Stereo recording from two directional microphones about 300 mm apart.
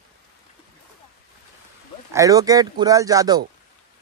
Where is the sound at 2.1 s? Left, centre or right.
Centre.